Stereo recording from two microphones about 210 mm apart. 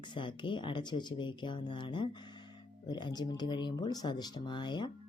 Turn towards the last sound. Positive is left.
turn(degrees=20)  # may be behind; listen again after turning